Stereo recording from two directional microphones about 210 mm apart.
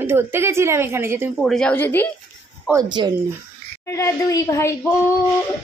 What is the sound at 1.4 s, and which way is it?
Speech, centre (ahead or behind).